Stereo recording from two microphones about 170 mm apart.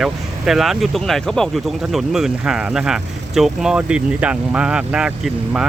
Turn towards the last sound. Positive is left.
turn(degrees=-5)  # may be behind; listen again after turning